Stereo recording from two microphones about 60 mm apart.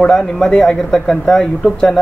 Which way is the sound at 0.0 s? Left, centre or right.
Centre.